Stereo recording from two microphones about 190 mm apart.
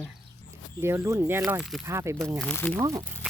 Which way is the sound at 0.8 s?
15° right (ahead or behind).